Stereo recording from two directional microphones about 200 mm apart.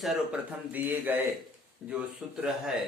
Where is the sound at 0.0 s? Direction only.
5° right (ahead or behind).